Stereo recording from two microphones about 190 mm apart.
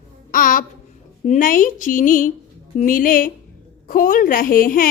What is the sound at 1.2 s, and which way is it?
Speech, 45° left (ahead or behind).